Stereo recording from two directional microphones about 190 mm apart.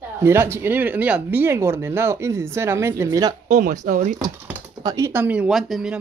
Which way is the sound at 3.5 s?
40° right (ahead or behind).